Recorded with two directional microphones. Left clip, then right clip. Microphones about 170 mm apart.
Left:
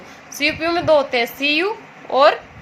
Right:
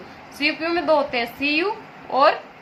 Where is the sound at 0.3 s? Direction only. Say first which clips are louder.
Left 3 dB; 55° left (ahead or behind).